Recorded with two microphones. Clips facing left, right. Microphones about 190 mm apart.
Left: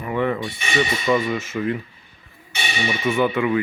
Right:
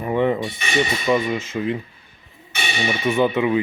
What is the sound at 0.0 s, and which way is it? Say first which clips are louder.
Speech: right 3 dB; 25° right (ahead or behind).